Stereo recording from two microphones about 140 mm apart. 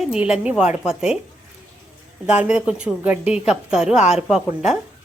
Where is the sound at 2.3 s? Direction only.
10° right (ahead or behind).